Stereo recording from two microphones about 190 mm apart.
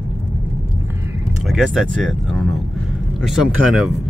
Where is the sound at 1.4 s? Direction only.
Centre (ahead or behind).